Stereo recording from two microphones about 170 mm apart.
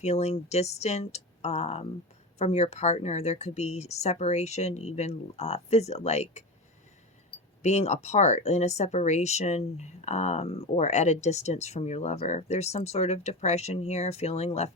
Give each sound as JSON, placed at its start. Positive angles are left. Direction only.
{"t": 0.0, "sound": "speech", "side_deg": 40}
{"t": 7.6, "sound": "speech", "side_deg": 40}